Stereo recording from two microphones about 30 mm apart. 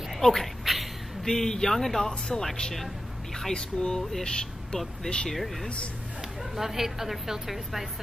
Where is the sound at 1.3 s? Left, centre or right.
Centre.